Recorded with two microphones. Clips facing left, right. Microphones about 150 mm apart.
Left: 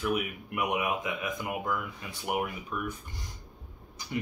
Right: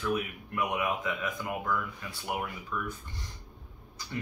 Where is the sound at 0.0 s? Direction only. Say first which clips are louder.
Left 1 dB; 15° left (ahead or behind).